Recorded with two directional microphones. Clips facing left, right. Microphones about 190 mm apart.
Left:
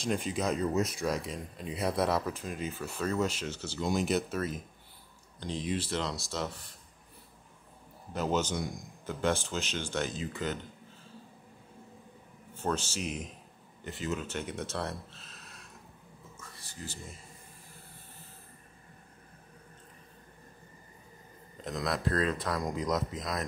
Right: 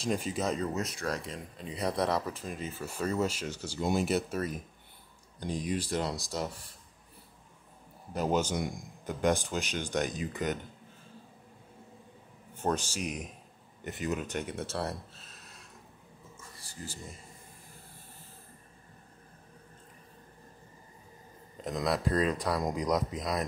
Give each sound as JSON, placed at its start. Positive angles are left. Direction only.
{"t": 0.0, "sound": "speech", "side_deg": -5}
{"t": 0.7, "sound": "speech", "side_deg": 10}
{"t": 5.8, "sound": "speech", "side_deg": -15}
{"t": 8.1, "sound": "speech", "side_deg": -10}
{"t": 12.6, "sound": "speech", "side_deg": -15}
{"t": 21.7, "sound": "speech", "side_deg": -5}